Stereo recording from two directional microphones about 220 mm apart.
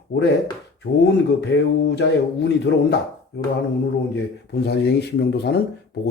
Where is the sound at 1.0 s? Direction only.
50° left (ahead or behind).